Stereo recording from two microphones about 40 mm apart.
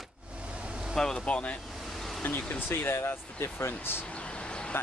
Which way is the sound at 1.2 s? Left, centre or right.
Left.